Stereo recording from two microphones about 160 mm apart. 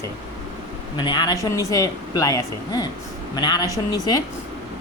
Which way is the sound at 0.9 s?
30° left (ahead or behind).